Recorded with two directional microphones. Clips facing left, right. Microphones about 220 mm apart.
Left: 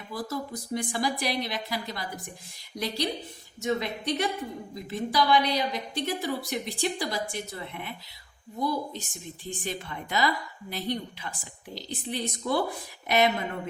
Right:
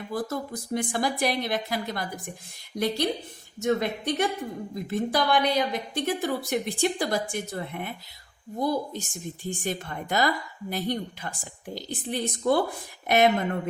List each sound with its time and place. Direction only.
0.1 s a woman's voice: 50° right (ahead or behind)